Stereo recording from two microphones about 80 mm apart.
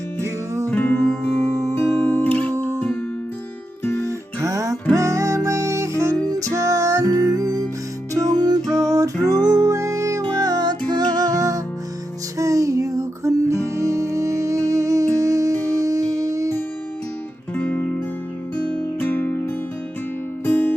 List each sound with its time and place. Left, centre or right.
0.2 s music: right
0.7 s music: left
3.8 s music: left
4.4 s music: right
6.2 s music: right
8.7 s music: right
17.6 s music: centre
18.9 s music: left